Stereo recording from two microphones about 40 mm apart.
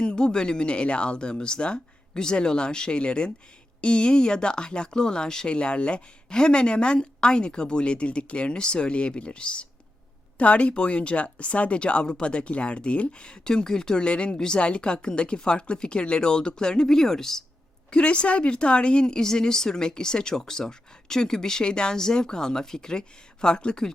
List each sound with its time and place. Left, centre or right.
0.0 s speech: left
17.9 s speech: left